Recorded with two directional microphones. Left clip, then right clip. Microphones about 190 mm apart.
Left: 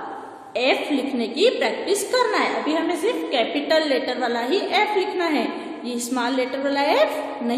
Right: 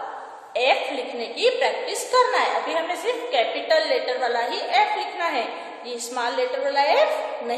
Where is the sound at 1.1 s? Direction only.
30° left (ahead or behind).